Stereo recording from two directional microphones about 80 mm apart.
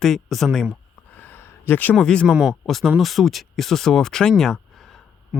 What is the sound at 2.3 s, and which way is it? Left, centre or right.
Speech, centre.